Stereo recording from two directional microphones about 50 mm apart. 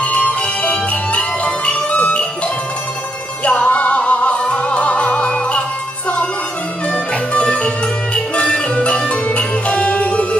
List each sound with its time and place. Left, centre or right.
0.0 s music: left
6.9 s music: centre